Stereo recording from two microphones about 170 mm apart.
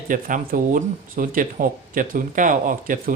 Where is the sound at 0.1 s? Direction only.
50° right (ahead or behind).